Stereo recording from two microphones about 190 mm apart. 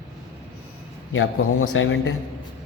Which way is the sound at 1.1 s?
90° left.